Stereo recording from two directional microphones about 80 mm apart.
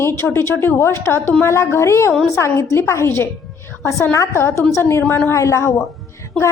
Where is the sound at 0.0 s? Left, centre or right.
Left.